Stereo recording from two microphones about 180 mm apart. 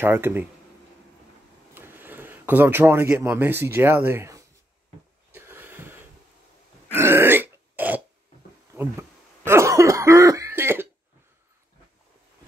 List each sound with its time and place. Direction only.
0.0 s speech: 10° right (ahead or behind)
1.8 s speech: 10° right (ahead or behind)
5.3 s a sound: 10° right (ahead or behind)
7.0 s burping: 15° right (ahead or behind)
9.4 s cough: 15° right (ahead or behind)